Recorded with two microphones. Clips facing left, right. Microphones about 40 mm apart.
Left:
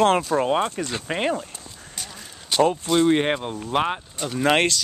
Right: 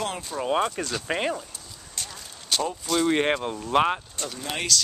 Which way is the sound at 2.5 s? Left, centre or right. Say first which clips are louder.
Left 7 dB; centre.